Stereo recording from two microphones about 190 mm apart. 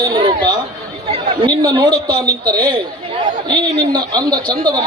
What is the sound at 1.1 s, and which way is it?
A man's voice, 20° right (ahead or behind).